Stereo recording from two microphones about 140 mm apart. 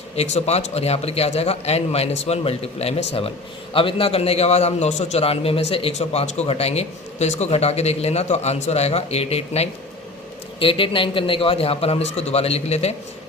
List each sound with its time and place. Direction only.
0.2 s a man's voice: 50° left (ahead or behind)